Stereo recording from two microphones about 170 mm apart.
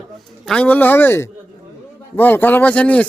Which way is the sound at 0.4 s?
5° left (ahead or behind).